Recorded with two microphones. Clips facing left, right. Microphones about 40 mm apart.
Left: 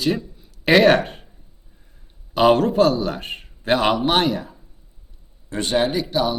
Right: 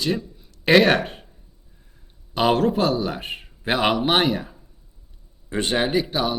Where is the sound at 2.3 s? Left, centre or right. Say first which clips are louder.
Left 3 dB; centre.